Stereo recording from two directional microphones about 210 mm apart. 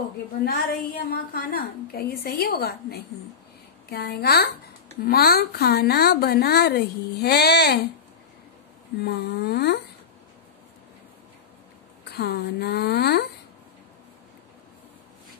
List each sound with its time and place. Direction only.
0.5 s a woman's voice: 45° left (ahead or behind)
9.0 s a woman's voice: 50° left (ahead or behind)
12.0 s a woman's voice: 50° left (ahead or behind)